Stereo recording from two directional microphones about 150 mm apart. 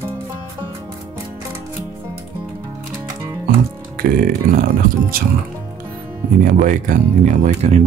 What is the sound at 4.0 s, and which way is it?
Speech, 70° right (ahead or behind).